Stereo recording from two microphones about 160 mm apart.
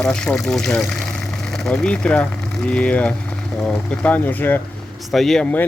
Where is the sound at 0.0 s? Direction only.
5° left (ahead or behind).